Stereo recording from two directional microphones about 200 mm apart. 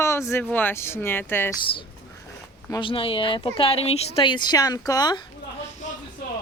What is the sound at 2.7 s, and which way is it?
Speech, 25° left (ahead or behind).